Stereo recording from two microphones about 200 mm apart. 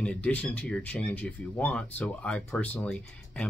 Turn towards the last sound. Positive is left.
turn(degrees=5)  # may be behind; listen again after turning